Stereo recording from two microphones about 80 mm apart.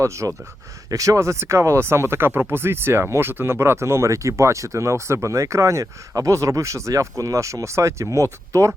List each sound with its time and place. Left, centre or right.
0.0 s speech: right